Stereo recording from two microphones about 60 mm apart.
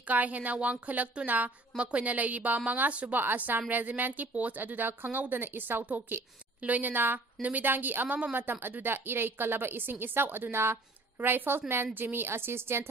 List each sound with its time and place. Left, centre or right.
0.1 s a woman's voice: right